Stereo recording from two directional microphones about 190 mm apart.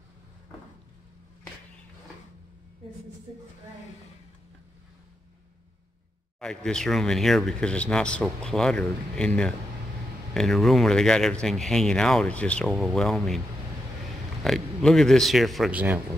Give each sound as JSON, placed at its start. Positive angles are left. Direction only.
{"t": 6.4, "sound": "speech", "side_deg": 5}
{"t": 14.4, "sound": "speech", "side_deg": 0}